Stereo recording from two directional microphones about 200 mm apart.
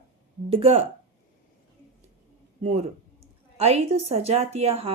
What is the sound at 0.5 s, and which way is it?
Speech, 30° right (ahead or behind).